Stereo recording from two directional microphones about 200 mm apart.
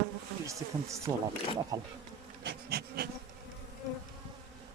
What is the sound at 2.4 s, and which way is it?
Bee, 50° right (ahead or behind).